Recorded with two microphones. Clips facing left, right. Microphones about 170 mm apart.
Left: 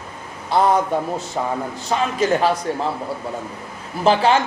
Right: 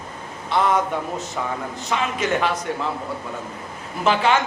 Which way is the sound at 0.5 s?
40° left (ahead or behind).